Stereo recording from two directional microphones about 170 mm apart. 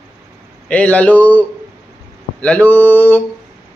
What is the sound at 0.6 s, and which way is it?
A man's voice, 5° left (ahead or behind).